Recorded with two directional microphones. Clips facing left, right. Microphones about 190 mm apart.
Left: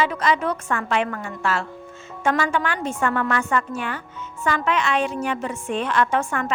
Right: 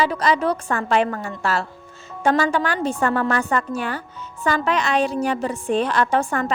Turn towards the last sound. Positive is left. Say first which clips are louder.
# right 2 dB
turn(degrees=-35)  # may be behind; listen again after turning